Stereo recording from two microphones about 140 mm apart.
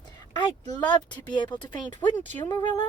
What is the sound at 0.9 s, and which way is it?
Speech, 30° left (ahead or behind).